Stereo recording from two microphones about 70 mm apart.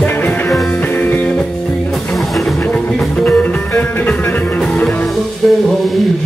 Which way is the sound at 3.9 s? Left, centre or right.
Left.